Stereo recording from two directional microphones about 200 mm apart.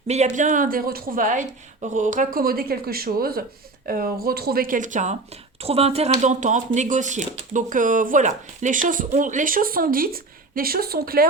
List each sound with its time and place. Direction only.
0.1 s a woman's voice: 35° right (ahead or behind)